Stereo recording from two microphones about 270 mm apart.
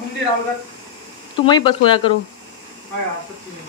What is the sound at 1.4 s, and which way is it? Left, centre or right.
Speech, centre.